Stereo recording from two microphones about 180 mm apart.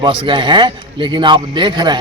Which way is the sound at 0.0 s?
25° right (ahead or behind).